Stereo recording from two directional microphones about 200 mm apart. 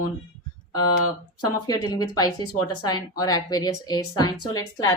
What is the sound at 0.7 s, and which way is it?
Speech, 20° left (ahead or behind).